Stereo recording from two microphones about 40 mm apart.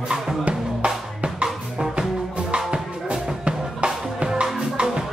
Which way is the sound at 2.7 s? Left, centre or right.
Right.